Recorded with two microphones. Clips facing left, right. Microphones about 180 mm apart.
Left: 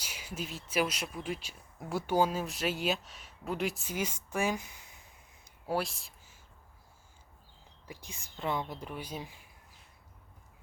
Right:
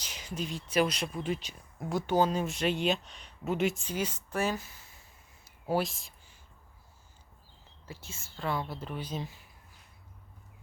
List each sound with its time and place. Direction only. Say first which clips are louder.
0.0 s speech: right 3 dB; 10° left (ahead or behind)
3.8 s speech: right 2 dB; 10° left (ahead or behind)
5.6 s speech: right 3 dB; centre (ahead or behind)
7.9 s speech: right 1 dB; 15° left (ahead or behind)